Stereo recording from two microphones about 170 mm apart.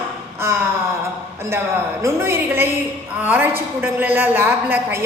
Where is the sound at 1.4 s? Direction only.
15° right (ahead or behind).